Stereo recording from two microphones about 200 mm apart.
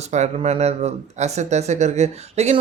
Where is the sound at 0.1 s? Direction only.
35° right (ahead or behind).